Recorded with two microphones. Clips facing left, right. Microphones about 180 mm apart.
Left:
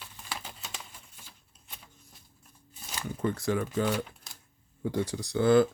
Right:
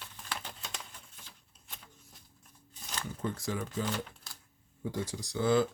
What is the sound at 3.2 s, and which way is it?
Speech, 65° left (ahead or behind).